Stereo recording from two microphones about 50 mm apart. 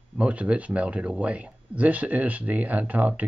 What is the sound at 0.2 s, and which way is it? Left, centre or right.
Speech, right.